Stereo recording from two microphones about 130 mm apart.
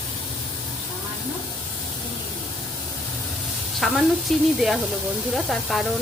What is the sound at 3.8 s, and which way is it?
A woman's voice, centre (ahead or behind).